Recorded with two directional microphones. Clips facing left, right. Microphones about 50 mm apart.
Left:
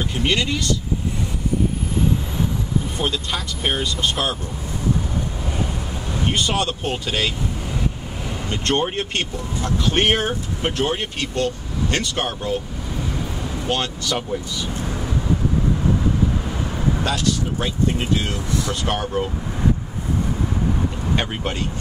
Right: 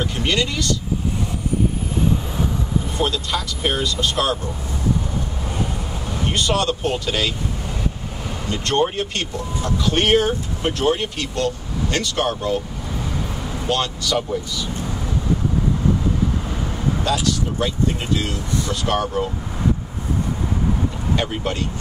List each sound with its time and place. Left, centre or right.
0.2 s speech: centre
3.0 s speech: centre
6.3 s speech: centre
8.5 s speech: left
13.7 s speech: left
17.6 s speech: left